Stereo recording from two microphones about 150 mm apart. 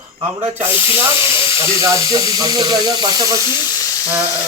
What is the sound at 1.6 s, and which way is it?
Speech, 20° right (ahead or behind).